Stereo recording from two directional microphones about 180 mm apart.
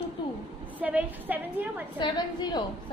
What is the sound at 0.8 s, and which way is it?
A woman's voice, 10° right (ahead or behind).